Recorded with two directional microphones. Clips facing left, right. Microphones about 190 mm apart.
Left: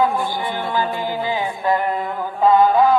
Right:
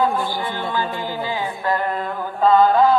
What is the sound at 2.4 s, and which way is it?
Chant, 15° left (ahead or behind).